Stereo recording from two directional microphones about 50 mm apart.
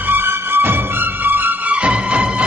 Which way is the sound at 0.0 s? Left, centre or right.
Right.